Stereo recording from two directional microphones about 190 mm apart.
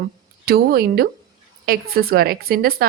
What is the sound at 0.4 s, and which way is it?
Speech, 55° right (ahead or behind).